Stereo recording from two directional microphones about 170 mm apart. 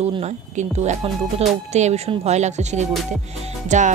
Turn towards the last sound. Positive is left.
turn(degrees=-45)  # may be behind; listen again after turning